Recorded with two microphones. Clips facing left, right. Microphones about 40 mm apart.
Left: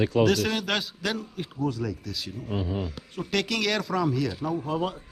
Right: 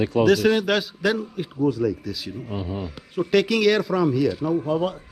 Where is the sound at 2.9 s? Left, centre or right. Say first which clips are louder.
Right 9 dB; centre.